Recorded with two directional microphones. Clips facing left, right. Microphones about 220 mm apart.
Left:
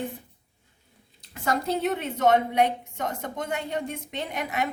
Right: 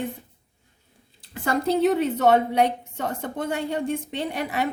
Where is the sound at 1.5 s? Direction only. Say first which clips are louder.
Right 5 dB; 35° right (ahead or behind).